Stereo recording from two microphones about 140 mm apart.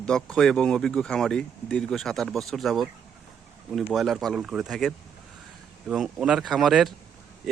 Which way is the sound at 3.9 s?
Centre (ahead or behind).